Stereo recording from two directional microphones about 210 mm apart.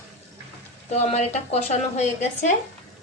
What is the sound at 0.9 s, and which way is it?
A woman's voice, 30° left (ahead or behind).